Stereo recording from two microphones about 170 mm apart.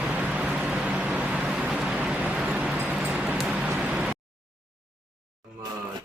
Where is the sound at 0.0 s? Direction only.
5° right (ahead or behind).